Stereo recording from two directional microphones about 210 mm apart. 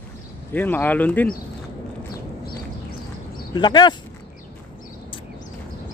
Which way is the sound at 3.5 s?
20° left (ahead or behind).